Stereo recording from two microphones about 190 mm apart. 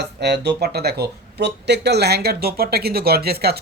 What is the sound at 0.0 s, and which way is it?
Speech, 60° right (ahead or behind).